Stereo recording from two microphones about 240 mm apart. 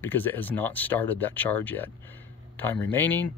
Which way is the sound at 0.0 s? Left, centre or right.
Centre.